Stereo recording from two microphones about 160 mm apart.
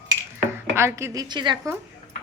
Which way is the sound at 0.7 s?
15° right (ahead or behind).